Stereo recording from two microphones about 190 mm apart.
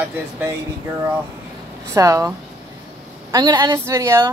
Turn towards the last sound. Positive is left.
turn(degrees=-15)  # may be behind; listen again after turning